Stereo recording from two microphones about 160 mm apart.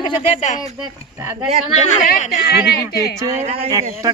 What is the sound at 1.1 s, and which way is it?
Speech, 10° right (ahead or behind).